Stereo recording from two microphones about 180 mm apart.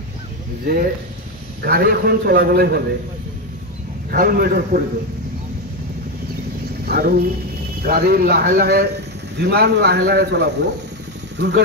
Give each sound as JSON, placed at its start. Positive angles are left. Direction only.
{"t": 1.6, "sound": "a man's voice", "side_deg": -55}
{"t": 4.1, "sound": "a man's voice", "side_deg": -55}
{"t": 6.9, "sound": "a man's voice", "side_deg": -55}